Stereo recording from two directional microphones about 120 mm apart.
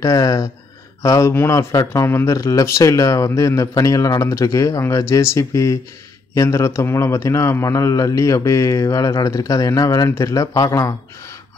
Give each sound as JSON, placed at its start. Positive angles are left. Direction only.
{"t": 0.0, "sound": "speech", "side_deg": 30}